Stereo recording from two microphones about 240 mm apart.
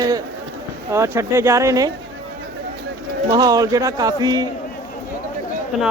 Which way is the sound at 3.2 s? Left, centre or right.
Centre.